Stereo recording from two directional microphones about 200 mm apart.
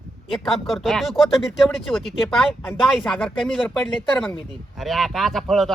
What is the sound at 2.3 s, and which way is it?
Speech, centre (ahead or behind).